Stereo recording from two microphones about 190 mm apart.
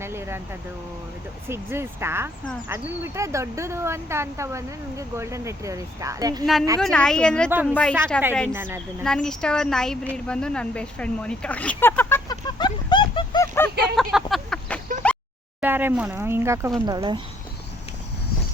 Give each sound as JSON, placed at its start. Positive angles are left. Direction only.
{"t": 0.0, "sound": "vehicle", "side_deg": -15}
{"t": 1.5, "sound": "speech", "side_deg": -15}
{"t": 6.4, "sound": "a woman's voice", "side_deg": 0}
{"t": 8.5, "sound": "speech", "side_deg": -10}
{"t": 9.0, "sound": "speech", "side_deg": 5}
{"t": 10.2, "sound": "a sound", "side_deg": 5}
{"t": 13.9, "sound": "a sound", "side_deg": 0}
{"t": 15.6, "sound": "speech", "side_deg": -10}